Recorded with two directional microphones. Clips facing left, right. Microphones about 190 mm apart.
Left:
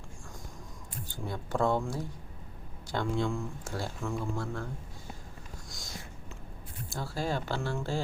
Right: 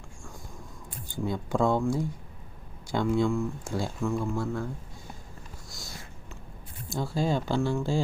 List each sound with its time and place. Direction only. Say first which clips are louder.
1.0 s speech: right 8 dB; 15° right (ahead or behind)
6.9 s speech: right 5 dB; 15° right (ahead or behind)